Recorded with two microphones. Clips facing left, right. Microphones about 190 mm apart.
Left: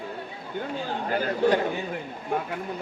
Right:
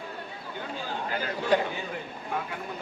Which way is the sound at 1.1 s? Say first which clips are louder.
Left 10 dB; 45° left (ahead or behind).